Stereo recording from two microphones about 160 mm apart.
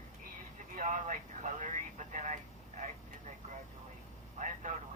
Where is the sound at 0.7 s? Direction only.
50° right (ahead or behind).